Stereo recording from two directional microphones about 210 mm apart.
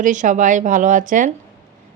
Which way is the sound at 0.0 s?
35° right (ahead or behind).